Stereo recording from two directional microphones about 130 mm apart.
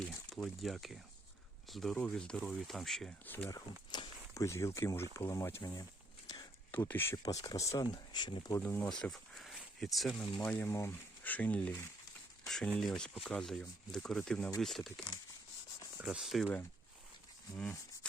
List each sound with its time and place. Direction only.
0.0 s a sound: 5° left (ahead or behind)
1.7 s speech: centre (ahead or behind)
3.2 s speech: 15° left (ahead or behind)
3.5 s speech: 30° left (ahead or behind)
6.2 s a sound: 30° left (ahead or behind)
6.7 s speech: 15° left (ahead or behind); by 8.5 s 35° left (ahead or behind)
8.6 s speech: 10° left (ahead or behind)